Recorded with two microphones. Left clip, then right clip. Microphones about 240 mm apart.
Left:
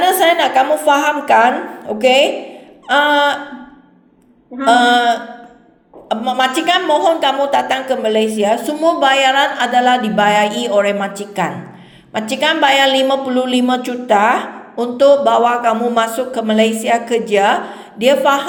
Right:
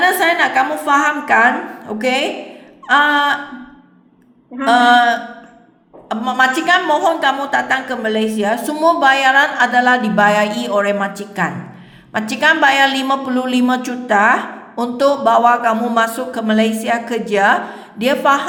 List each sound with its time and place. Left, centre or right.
0.0 s a woman's voice: centre
4.6 s a woman's voice: centre